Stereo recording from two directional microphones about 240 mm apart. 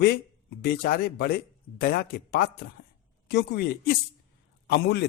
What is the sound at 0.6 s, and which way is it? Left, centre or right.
A man's voice, left.